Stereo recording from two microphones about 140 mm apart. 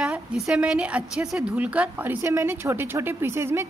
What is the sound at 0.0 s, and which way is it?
A woman's voice, 5° right (ahead or behind).